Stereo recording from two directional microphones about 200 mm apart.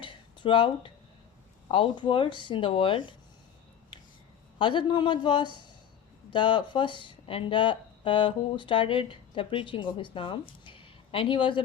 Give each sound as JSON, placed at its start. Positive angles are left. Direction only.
{"t": 0.0, "sound": "a sound", "side_deg": 25}
{"t": 1.6, "sound": "speech", "side_deg": 25}
{"t": 4.5, "sound": "speech", "side_deg": 20}